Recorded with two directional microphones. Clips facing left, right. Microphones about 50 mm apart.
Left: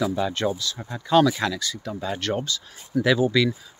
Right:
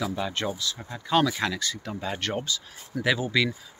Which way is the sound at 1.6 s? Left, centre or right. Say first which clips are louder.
Left 1 dB; right.